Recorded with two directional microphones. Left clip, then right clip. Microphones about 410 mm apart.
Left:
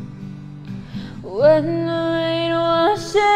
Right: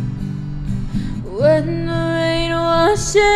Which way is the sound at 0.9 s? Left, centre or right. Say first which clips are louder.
Even; left.